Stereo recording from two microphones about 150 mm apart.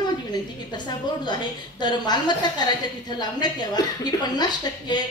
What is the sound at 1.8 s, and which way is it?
A woman's voice, 30° left (ahead or behind).